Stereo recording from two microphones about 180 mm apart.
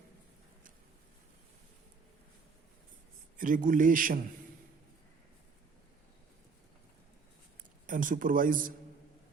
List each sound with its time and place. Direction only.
3.3 s a man's voice: 50° right (ahead or behind)
7.9 s a man's voice: 50° right (ahead or behind)